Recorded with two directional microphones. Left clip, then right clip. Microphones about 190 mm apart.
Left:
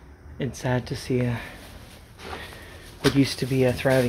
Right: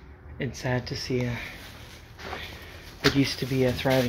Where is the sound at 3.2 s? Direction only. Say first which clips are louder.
Left 3 dB; 25° left (ahead or behind).